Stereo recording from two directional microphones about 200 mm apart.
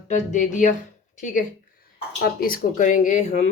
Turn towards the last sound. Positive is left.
turn(degrees=35)  # may be behind; listen again after turning